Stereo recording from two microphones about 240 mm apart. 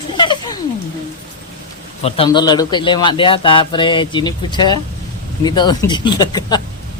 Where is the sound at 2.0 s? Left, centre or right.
Left.